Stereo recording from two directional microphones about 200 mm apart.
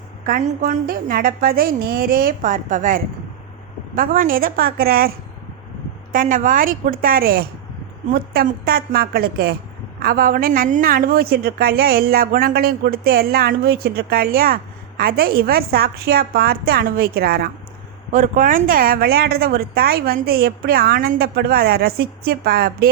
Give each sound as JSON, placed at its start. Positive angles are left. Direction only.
{"t": 0.3, "sound": "a woman's voice", "side_deg": -40}